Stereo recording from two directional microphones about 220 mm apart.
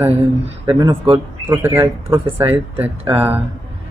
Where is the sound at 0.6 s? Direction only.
15° right (ahead or behind).